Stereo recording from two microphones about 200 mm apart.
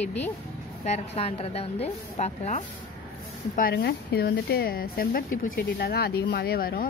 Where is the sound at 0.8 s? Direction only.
35° left (ahead or behind).